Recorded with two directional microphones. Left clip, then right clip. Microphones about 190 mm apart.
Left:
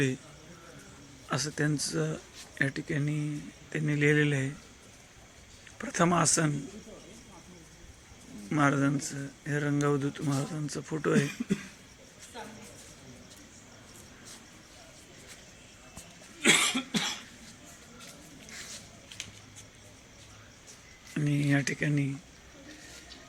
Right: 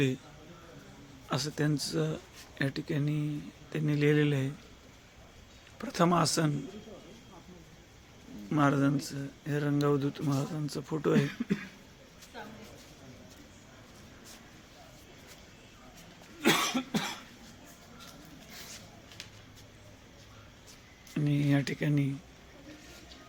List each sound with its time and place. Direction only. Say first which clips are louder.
1.3 s speech: left 1 dB; centre (ahead or behind)
5.8 s speech: left 1 dB; centre (ahead or behind)
8.4 s speech: left 1 dB; centre (ahead or behind)
16.4 s cough: left 3 dB; 35° right (ahead or behind)
16.9 s cough: left 3 dB; 55° right (ahead or behind)
21.1 s a sound: left 1 dB; centre (ahead or behind)